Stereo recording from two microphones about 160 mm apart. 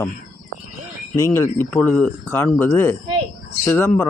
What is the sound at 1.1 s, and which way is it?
Speech, 15° left (ahead or behind).